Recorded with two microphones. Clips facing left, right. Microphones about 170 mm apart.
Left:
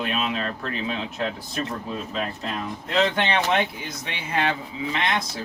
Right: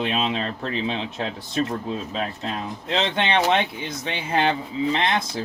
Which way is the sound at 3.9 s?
30° right (ahead or behind).